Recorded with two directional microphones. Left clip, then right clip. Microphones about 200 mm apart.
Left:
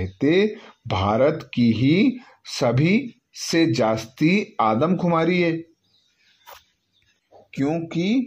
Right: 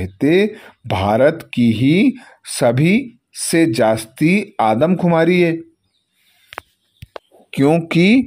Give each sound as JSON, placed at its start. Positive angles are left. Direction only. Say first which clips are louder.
{"t": 0.0, "sound": "speech", "louder": "right 4 dB", "side_deg": -20}
{"t": 7.5, "sound": "speech", "louder": "right 10 dB", "side_deg": -40}